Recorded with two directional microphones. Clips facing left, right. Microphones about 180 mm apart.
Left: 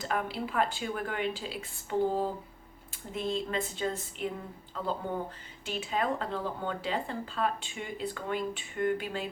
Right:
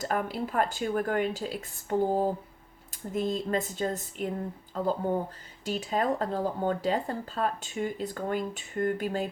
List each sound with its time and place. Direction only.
0.0 s speech: 45° right (ahead or behind)